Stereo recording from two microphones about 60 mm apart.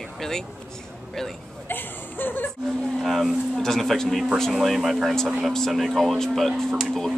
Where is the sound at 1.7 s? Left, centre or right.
Left.